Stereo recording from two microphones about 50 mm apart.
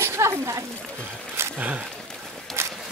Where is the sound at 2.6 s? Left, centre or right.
Right.